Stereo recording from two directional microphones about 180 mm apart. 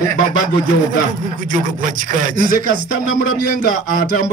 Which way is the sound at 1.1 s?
50° right (ahead or behind).